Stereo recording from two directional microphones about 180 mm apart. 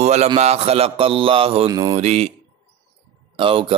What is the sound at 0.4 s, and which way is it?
A man's voice, 35° right (ahead or behind).